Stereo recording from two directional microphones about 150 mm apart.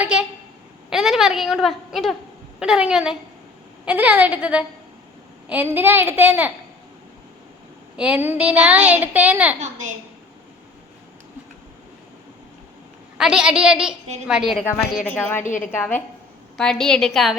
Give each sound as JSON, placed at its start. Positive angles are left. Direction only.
{"t": 0.0, "sound": "a sound", "side_deg": -5}
{"t": 0.9, "sound": "a woman's voice", "side_deg": 0}
{"t": 7.9, "sound": "a child's voice", "side_deg": -10}
{"t": 13.1, "sound": "a woman's voice", "side_deg": -5}
{"t": 15.0, "sound": "a woman's voice", "side_deg": 10}
{"t": 15.4, "sound": "a woman's voice", "side_deg": 60}
{"t": 15.7, "sound": "a woman's voice", "side_deg": 15}